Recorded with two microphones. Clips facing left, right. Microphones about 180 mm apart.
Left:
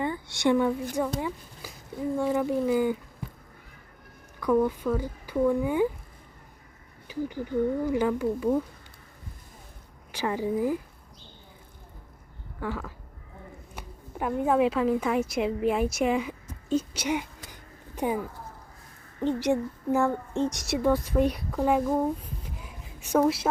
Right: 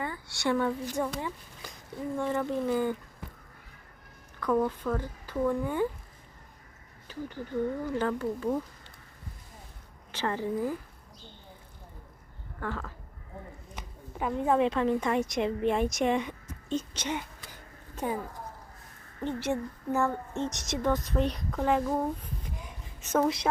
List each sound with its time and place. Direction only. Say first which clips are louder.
0.0 s speech: left 6 dB; 20° left (ahead or behind)
1.6 s a sound: left 2 dB; 5° left (ahead or behind)
2.1 s speech: left 4 dB; 10° left (ahead or behind)
4.4 s speech: left 4 dB; 10° left (ahead or behind)
7.1 s speech: left 5 dB; 10° left (ahead or behind)
10.1 s speech: left 3 dB; 10° left (ahead or behind)
12.5 s a woman's voice: left 3 dB; 10° left (ahead or behind)
19.2 s a child's voice: left 5 dB; 15° left (ahead or behind)